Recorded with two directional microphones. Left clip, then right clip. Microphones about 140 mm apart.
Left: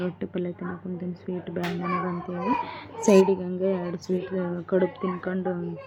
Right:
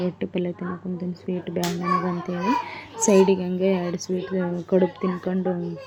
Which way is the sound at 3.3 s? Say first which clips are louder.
Right 3 dB; 30° right (ahead or behind).